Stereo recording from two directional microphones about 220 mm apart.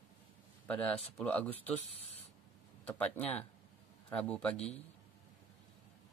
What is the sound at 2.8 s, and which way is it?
Speech, 5° left (ahead or behind).